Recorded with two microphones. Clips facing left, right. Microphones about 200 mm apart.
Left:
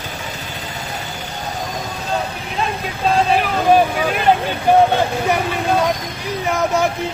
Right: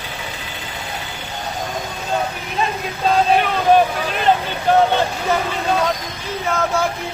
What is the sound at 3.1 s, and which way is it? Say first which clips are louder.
Vehicle: right 1 dB; centre (ahead or behind).